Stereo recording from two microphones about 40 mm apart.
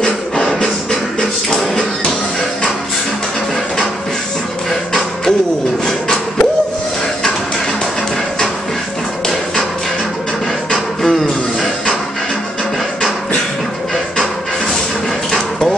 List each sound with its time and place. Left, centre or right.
0.0 s music: centre
10.7 s music: centre